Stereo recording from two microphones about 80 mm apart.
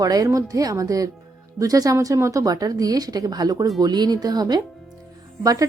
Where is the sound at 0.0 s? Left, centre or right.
Right.